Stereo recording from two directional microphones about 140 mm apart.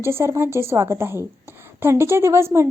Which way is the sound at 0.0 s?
20° right (ahead or behind).